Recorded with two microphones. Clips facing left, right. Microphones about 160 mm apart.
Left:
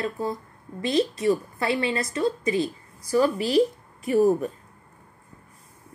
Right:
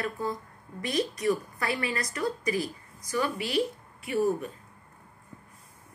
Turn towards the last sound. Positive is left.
turn(degrees=40)  # may be behind; listen again after turning